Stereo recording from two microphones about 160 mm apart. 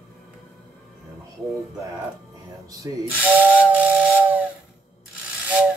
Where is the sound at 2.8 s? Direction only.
20° right (ahead or behind).